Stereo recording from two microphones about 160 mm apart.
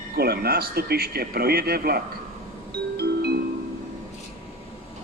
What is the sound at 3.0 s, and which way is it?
Music, 90° right.